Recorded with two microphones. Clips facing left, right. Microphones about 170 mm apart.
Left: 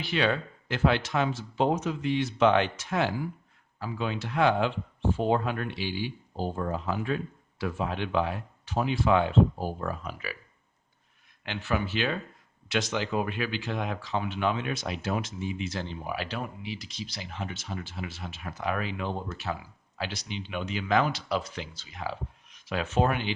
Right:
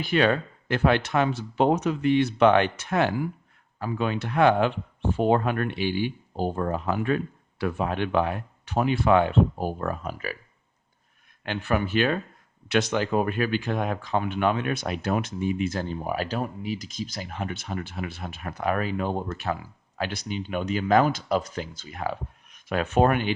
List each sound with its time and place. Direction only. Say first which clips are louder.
0.0 s speech: right 5 dB; 50° right (ahead or behind)
11.4 s speech: right 4 dB; 55° right (ahead or behind)